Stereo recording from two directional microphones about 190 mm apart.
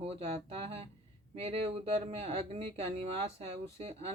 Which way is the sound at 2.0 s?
35° right (ahead or behind).